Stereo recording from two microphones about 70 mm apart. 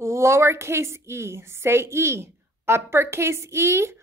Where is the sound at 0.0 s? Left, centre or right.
Right.